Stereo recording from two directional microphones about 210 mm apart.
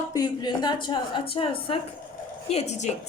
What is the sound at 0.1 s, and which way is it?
A woman's voice, 20° left (ahead or behind).